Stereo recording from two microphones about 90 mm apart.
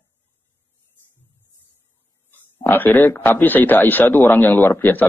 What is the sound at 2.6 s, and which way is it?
Speech, 20° left (ahead or behind).